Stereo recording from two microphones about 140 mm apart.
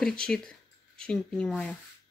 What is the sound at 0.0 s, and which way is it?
Speech, 5° left (ahead or behind).